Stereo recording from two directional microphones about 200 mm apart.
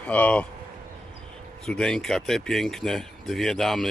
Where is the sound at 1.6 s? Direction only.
5° left (ahead or behind).